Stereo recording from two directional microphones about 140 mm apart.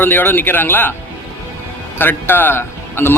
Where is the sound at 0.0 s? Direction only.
15° left (ahead or behind).